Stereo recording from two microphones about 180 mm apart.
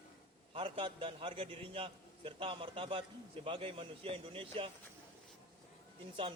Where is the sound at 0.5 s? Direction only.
30° right (ahead or behind).